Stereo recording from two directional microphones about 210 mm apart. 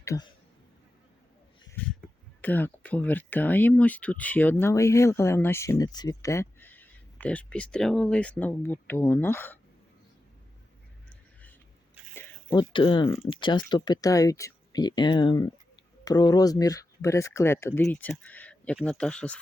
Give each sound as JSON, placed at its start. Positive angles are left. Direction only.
{"t": 0.0, "sound": "speech", "side_deg": 15}
{"t": 1.8, "sound": "a sound", "side_deg": 10}
{"t": 2.4, "sound": "speech", "side_deg": 10}
{"t": 12.1, "sound": "zipper", "side_deg": 10}
{"t": 12.5, "sound": "speech", "side_deg": 25}